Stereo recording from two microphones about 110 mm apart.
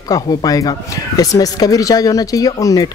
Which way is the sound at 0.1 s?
35° left (ahead or behind).